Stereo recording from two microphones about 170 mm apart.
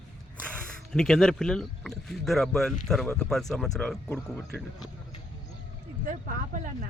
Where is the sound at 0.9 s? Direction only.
5° left (ahead or behind).